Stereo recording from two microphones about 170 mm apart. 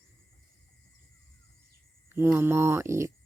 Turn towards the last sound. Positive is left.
turn(degrees=-15)  # may be behind; listen again after turning